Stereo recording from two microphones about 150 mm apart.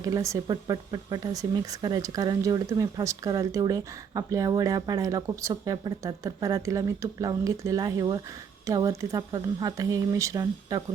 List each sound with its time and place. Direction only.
0.0 s speech: 20° right (ahead or behind)